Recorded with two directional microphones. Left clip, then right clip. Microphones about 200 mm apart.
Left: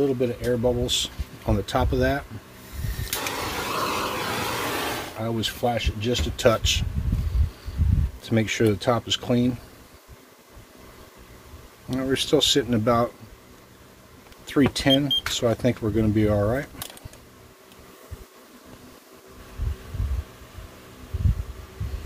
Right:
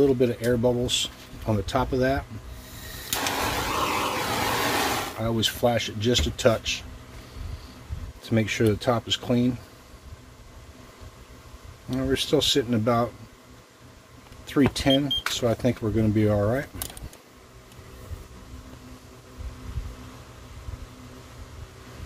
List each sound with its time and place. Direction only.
0.0 s speech: 10° right (ahead or behind)
0.8 s speech: 10° left (ahead or behind)
3.2 s a sound: 25° right (ahead or behind)
3.5 s vehicle: 5° right (ahead or behind)
4.5 s a sound: 40° right (ahead or behind)
5.2 s speech: 5° right (ahead or behind)
6.3 s speech: 10° left (ahead or behind)
8.2 s speech: 10° left (ahead or behind)
11.9 s speech: 10° left (ahead or behind)
14.4 s speech: 10° left (ahead or behind)